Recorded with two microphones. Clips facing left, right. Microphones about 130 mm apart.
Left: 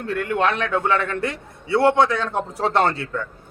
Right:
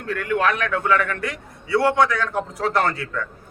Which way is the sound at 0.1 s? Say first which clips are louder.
Even; 30° left (ahead or behind).